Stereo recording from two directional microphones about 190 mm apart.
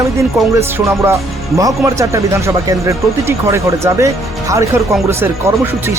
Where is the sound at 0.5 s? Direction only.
15° right (ahead or behind).